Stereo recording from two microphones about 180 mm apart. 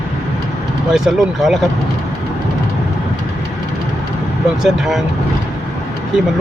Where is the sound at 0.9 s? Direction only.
Centre (ahead or behind).